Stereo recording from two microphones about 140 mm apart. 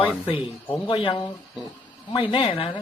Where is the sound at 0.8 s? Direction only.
35° left (ahead or behind).